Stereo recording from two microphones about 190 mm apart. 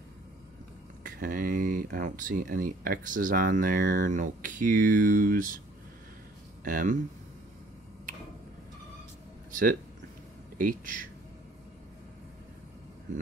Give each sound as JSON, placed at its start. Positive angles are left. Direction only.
{"t": 1.0, "sound": "speech", "side_deg": -45}
{"t": 6.6, "sound": "speech", "side_deg": -45}
{"t": 9.5, "sound": "a sound", "side_deg": -45}
{"t": 10.6, "sound": "speech", "side_deg": -45}